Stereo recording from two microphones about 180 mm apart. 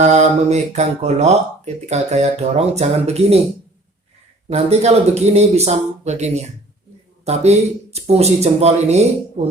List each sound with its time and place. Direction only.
0.0 s speech: 40° right (ahead or behind)
4.4 s speech: 35° right (ahead or behind)